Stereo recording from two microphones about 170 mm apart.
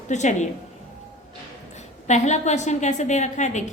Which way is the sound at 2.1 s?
45° left (ahead or behind).